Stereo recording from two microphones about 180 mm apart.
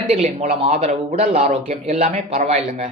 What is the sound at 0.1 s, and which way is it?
A man's voice, 35° right (ahead or behind).